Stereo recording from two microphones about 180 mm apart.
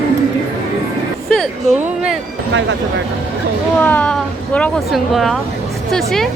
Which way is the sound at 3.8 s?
10° left (ahead or behind).